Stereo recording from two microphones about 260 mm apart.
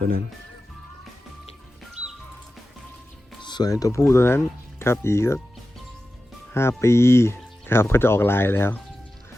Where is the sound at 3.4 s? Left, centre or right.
Centre.